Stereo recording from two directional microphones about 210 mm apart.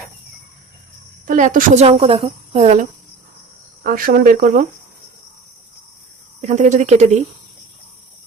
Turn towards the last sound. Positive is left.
turn(degrees=-35)  # may be behind; listen again after turning